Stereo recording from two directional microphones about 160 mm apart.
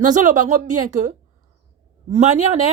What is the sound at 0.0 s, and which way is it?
A woman's voice, 50° right (ahead or behind).